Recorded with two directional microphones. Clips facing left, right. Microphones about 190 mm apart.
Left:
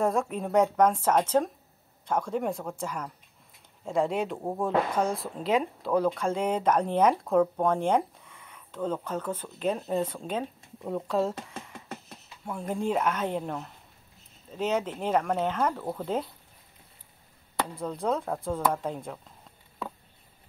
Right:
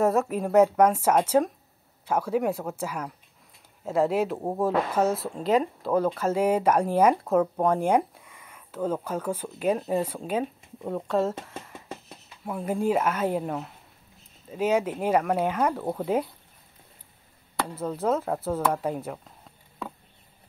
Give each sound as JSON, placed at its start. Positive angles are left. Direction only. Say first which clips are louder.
{"t": 0.0, "sound": "speech", "louder": "right 4 dB", "side_deg": -5}
{"t": 15.8, "sound": "speech", "louder": "right 4 dB", "side_deg": -20}
{"t": 17.7, "sound": "speech", "louder": "right 4 dB", "side_deg": -5}